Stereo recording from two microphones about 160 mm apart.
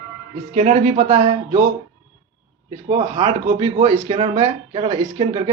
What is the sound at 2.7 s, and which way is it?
Speech, 35° right (ahead or behind).